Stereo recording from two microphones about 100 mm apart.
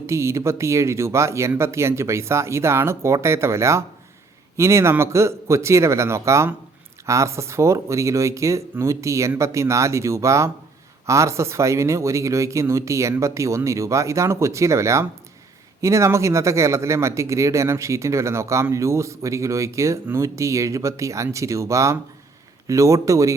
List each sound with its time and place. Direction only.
0.0 s speech: 30° right (ahead or behind)